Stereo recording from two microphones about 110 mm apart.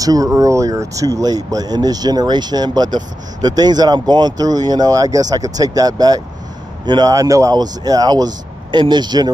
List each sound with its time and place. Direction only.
0.0 s speech: 30° right (ahead or behind)